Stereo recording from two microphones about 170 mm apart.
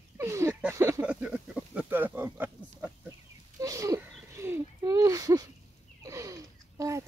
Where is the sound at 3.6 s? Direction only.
20° right (ahead or behind).